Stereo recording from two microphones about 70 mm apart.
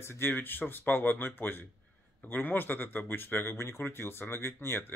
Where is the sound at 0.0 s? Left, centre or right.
Left.